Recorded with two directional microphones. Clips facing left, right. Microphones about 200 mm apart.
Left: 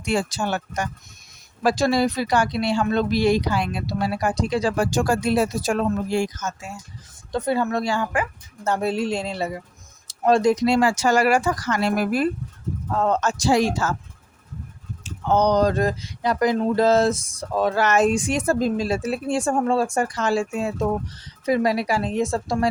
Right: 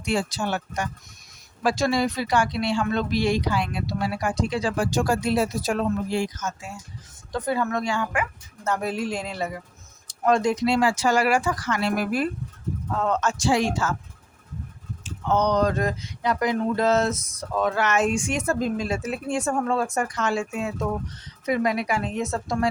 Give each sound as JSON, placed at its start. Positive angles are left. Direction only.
{"t": 0.0, "sound": "speech", "side_deg": 50}
{"t": 7.3, "sound": "speech", "side_deg": 25}
{"t": 15.3, "sound": "speech", "side_deg": 35}